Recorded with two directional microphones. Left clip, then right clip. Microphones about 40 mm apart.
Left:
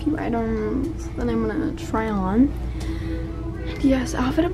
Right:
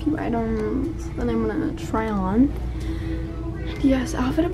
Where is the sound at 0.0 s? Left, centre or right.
Centre.